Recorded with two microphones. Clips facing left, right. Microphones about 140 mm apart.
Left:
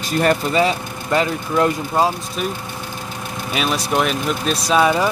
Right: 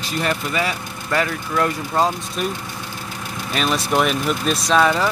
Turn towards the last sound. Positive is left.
turn(degrees=10)  # may be behind; listen again after turning